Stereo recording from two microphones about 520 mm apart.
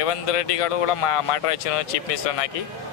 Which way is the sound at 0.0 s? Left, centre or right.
Left.